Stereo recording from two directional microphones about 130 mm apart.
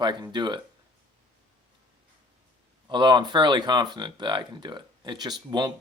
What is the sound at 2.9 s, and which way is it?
Speech, 35° right (ahead or behind).